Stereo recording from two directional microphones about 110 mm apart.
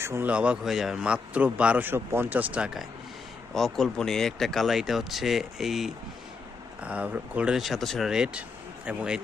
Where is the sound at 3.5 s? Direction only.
Centre (ahead or behind).